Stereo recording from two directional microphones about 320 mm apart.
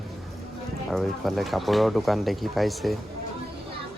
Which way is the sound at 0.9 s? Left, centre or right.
Centre.